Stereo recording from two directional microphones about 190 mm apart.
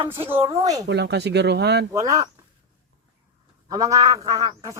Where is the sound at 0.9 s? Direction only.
65° right (ahead or behind).